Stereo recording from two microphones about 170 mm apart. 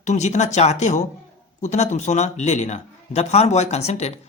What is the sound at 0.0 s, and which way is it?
A man's voice, 45° left (ahead or behind).